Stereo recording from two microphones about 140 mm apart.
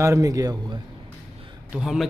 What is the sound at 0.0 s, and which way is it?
Speech, 25° right (ahead or behind).